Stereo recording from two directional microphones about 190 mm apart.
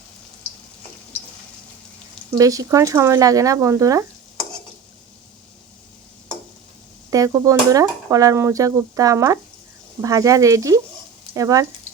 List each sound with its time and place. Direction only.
2.4 s speech: 20° right (ahead or behind)
7.1 s speech: 20° right (ahead or behind)